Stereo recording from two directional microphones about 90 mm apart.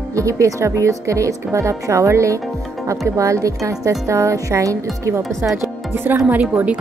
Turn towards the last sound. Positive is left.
turn(degrees=-15)  # may be behind; listen again after turning